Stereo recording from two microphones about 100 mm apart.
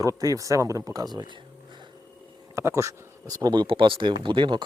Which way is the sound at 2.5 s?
30° right (ahead or behind).